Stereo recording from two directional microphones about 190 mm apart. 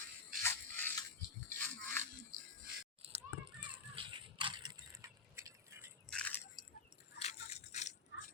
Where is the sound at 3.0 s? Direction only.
30° right (ahead or behind); by 5.9 s 15° right (ahead or behind).